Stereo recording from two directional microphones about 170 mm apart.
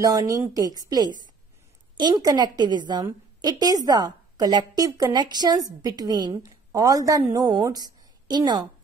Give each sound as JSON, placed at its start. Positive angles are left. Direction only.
{"t": 0.0, "sound": "a woman's voice", "side_deg": -20}